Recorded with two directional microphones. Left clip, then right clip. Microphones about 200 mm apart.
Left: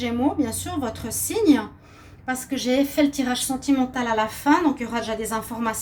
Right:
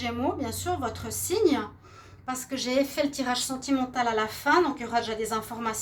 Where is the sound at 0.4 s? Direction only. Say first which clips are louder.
Left 2 dB; 45° right (ahead or behind).